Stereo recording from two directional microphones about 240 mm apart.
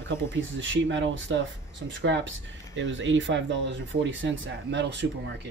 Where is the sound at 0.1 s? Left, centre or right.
Right.